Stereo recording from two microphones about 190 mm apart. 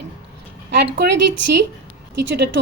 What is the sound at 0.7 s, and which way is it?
A woman's voice, 60° right (ahead or behind).